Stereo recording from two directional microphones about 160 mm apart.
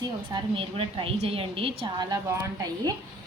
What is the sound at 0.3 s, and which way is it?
A woman's voice, 35° right (ahead or behind).